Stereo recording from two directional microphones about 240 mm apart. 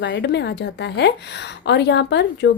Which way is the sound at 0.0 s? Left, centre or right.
Left.